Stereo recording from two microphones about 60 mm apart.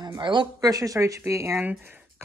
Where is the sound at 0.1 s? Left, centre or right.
Right.